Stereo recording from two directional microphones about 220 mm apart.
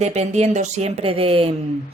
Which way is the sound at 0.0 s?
30° right (ahead or behind).